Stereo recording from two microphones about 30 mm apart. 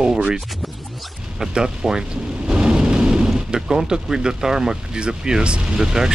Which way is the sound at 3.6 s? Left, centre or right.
Right.